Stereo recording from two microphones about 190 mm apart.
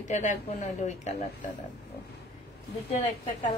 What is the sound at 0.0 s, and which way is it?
Speech, 40° left (ahead or behind).